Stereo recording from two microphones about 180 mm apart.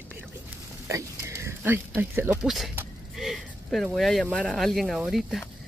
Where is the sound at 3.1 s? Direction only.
Centre (ahead or behind).